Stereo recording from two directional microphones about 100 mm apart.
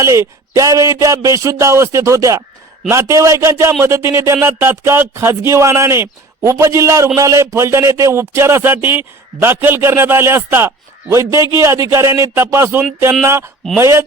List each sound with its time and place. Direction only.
0.0 s a man's voice: 30° right (ahead or behind)